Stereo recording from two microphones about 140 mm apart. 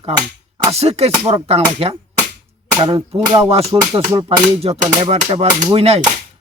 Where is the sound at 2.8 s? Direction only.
30° right (ahead or behind).